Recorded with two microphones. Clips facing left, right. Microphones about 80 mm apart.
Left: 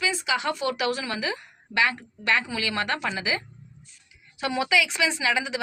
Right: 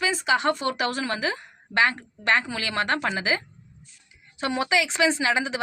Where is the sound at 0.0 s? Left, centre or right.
Right.